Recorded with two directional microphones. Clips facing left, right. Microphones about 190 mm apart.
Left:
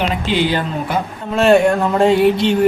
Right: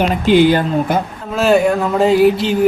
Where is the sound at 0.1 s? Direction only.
50° right (ahead or behind).